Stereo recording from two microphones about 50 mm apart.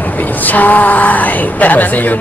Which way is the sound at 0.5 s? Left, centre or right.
Left.